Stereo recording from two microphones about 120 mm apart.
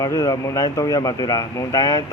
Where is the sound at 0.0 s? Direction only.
30° left (ahead or behind).